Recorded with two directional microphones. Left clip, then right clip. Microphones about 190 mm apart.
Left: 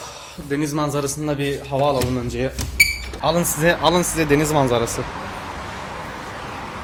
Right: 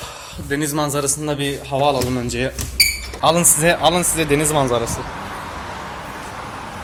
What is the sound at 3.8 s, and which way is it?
Speech, 15° left (ahead or behind).